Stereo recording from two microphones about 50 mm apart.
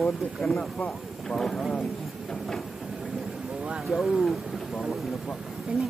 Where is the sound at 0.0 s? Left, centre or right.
Centre.